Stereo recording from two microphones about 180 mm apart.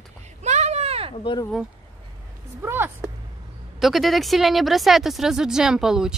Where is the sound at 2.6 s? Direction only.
15° right (ahead or behind).